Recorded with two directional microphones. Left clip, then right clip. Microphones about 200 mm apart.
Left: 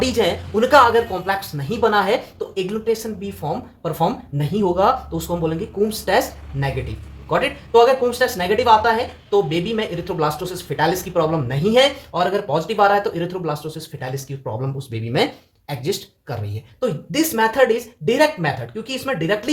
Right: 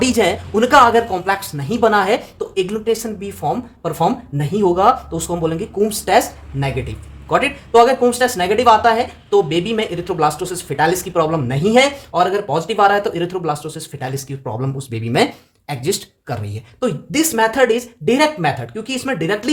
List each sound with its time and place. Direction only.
0.0 s speech: 40° right (ahead or behind)